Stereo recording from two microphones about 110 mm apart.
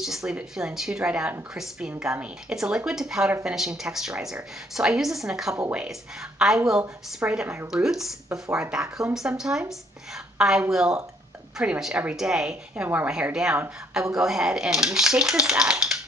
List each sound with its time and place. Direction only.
0.0 s a woman's voice: 5° right (ahead or behind)
7.4 s speech: 25° right (ahead or behind)
7.7 s a woman's voice: 5° right (ahead or behind)